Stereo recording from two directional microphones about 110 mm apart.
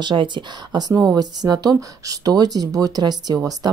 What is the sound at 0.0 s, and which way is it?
A woman's voice, 45° right (ahead or behind).